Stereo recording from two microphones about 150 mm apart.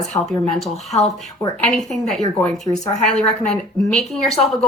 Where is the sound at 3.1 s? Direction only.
5° left (ahead or behind).